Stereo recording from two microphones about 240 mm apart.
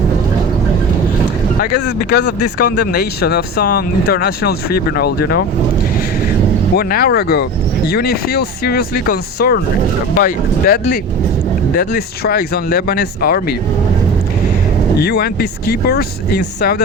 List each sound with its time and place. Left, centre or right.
1.7 s speech: left
6.7 s speech: left
14.9 s speech: left